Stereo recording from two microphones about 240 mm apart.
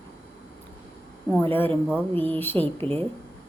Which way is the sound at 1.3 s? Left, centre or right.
Centre.